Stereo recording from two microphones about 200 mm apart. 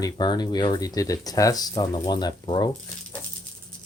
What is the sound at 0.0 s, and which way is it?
Speech, 20° left (ahead or behind).